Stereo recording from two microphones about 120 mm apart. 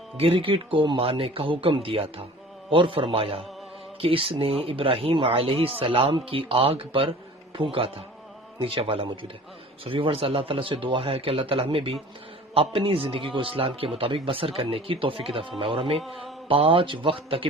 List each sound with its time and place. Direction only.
0.2 s a man's voice: 50° right (ahead or behind)
16.0 s speech: centre (ahead or behind)
16.5 s a man's voice: 50° right (ahead or behind)